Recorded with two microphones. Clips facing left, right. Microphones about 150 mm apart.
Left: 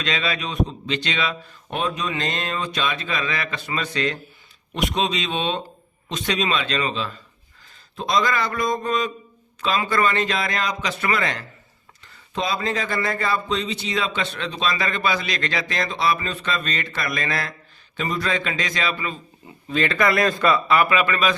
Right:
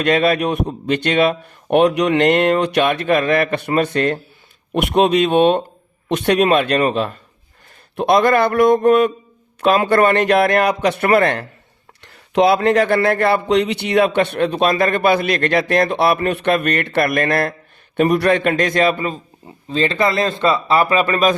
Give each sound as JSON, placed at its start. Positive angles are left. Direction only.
{"t": 0.0, "sound": "speech", "side_deg": -55}
{"t": 12.0, "sound": "speech", "side_deg": -75}
{"t": 19.7, "sound": "speech", "side_deg": -30}